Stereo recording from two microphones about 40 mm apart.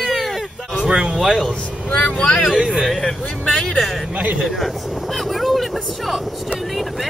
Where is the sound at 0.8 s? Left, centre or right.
Centre.